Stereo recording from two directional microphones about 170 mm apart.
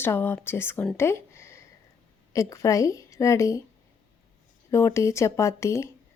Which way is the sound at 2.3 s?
20° left (ahead or behind).